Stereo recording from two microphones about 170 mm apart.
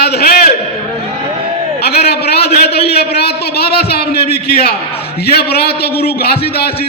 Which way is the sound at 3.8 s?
65° left (ahead or behind).